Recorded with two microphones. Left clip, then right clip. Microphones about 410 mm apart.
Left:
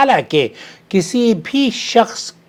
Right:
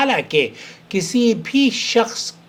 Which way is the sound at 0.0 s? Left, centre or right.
Left.